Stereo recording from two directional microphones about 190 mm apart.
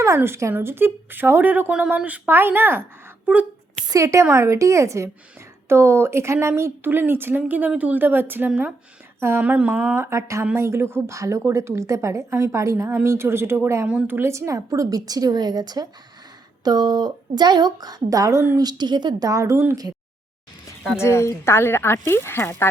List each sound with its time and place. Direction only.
0.0 s speech: 15° right (ahead or behind)
3.8 s a woman's voice: 15° right (ahead or behind)
21.0 s speech: 15° left (ahead or behind)